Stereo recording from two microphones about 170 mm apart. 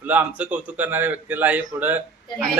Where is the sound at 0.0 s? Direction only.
10° right (ahead or behind).